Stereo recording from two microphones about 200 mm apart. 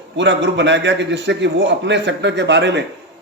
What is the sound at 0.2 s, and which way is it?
A man's voice, 60° right (ahead or behind).